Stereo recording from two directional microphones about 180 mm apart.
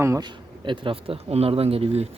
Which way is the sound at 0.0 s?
20° right (ahead or behind).